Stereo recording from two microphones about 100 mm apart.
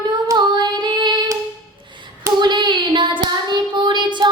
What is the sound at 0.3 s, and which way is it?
Female singing, 50° right (ahead or behind).